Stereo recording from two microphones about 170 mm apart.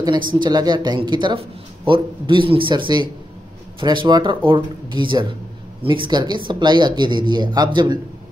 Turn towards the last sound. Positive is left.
turn(degrees=-25)  # may be behind; listen again after turning